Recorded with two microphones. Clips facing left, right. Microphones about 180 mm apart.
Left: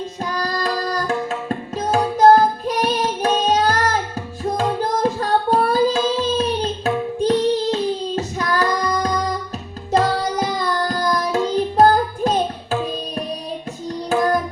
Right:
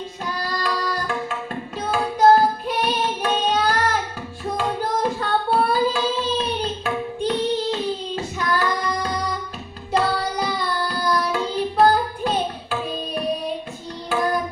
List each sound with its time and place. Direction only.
0.3 s tabla: 40° left (ahead or behind)
4.4 s carnatic music: 40° left (ahead or behind)